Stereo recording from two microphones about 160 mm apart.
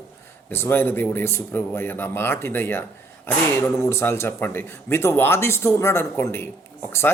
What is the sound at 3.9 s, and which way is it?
Speech, 15° left (ahead or behind).